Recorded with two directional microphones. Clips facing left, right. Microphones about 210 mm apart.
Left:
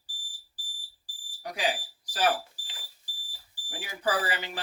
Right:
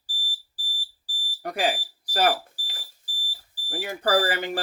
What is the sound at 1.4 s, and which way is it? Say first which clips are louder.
Smoke detector: right 5 dB; 60° right (ahead or behind).